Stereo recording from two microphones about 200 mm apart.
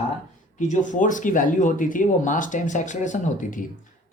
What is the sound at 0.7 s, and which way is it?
Speech, 40° left (ahead or behind).